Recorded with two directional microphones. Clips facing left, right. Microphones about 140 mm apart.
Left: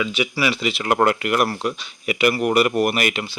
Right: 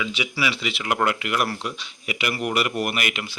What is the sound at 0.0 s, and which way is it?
A man's voice, 50° left (ahead or behind).